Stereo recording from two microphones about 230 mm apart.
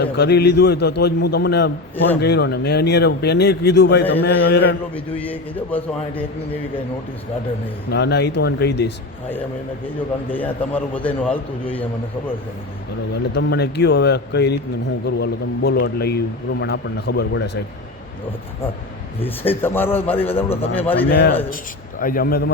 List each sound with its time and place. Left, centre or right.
0.0 s speech: left
4.9 s a man's voice: centre
7.9 s speech: left
10.3 s a man's voice: centre
13.3 s speech: left
19.2 s a man's voice: centre
21.1 s a man's voice: left